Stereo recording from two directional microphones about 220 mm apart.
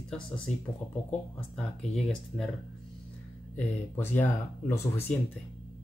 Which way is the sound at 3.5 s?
10° left (ahead or behind).